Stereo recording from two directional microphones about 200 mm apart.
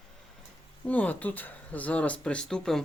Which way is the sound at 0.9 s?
10° left (ahead or behind).